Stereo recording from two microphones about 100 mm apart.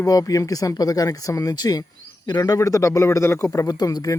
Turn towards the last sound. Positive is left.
turn(degrees=40)  # may be behind; listen again after turning